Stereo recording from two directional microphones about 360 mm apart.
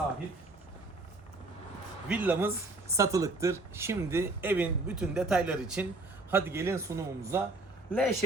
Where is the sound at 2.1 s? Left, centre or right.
Centre.